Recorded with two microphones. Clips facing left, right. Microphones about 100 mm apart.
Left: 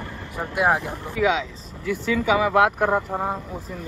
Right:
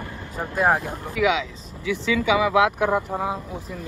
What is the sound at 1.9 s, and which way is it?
Speech, 45° left (ahead or behind).